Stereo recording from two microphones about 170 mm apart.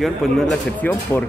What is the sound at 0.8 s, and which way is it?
Speech, 10° left (ahead or behind).